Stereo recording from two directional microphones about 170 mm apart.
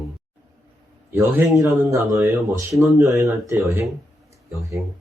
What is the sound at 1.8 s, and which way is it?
Speech, 15° right (ahead or behind).